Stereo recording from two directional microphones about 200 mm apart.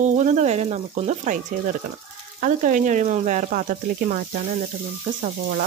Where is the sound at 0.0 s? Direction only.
35° right (ahead or behind).